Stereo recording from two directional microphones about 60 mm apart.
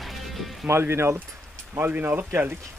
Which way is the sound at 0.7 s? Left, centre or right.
Right.